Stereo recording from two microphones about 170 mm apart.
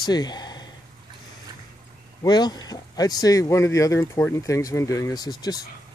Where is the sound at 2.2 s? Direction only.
25° left (ahead or behind).